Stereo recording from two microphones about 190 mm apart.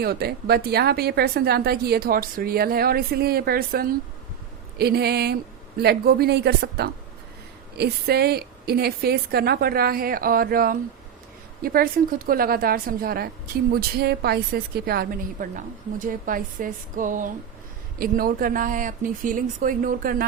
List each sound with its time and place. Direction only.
0.0 s a woman's voice: 55° right (ahead or behind)